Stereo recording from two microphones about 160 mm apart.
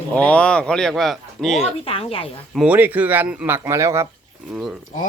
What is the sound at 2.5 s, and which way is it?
Speech, 10° right (ahead or behind).